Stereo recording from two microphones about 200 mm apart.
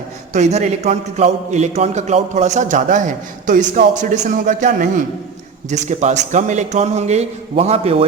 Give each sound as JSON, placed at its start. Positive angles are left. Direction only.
{"t": 0.3, "sound": "a man's voice", "side_deg": -35}